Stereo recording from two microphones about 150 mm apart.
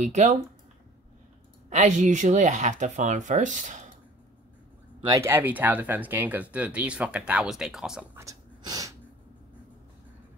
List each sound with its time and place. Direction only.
0.0 s speech: 50° right (ahead or behind)
1.7 s speech: 50° right (ahead or behind)
5.0 s speech: 25° right (ahead or behind)
5.3 s speech: 10° right (ahead or behind)
8.2 s a sound: 25° right (ahead or behind)